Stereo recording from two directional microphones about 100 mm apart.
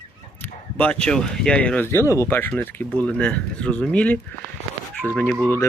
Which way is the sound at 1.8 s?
25° left (ahead or behind).